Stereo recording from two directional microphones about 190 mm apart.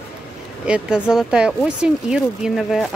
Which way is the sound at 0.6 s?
5° right (ahead or behind).